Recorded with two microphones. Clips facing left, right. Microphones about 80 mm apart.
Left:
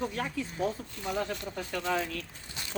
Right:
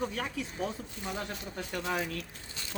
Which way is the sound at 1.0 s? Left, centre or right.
Left.